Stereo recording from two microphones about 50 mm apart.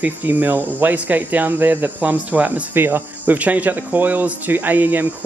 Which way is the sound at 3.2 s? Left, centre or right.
Right.